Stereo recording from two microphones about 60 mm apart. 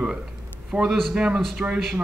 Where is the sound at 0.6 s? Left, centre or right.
Centre.